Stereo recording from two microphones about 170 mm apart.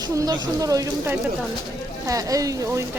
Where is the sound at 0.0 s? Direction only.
25° right (ahead or behind).